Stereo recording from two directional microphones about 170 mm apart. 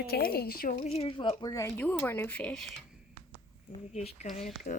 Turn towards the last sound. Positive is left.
turn(degrees=55)  # may be behind; listen again after turning